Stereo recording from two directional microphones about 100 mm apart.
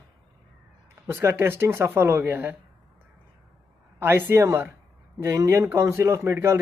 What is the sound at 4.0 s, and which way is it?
Speech, 20° right (ahead or behind).